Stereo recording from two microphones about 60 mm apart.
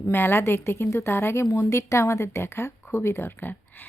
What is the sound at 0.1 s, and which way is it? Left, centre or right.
A woman's voice, left.